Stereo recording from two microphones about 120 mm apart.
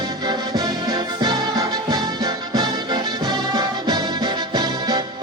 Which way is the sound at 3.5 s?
30° right (ahead or behind).